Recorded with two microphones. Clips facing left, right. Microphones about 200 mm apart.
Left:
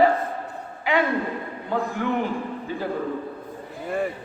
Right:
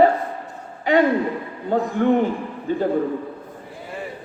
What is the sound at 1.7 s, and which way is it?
Speech, 55° right (ahead or behind).